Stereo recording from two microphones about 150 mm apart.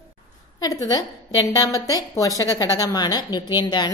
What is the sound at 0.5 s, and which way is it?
A woman's voice, 25° left (ahead or behind).